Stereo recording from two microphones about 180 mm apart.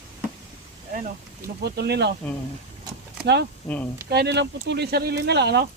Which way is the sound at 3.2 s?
70° right (ahead or behind).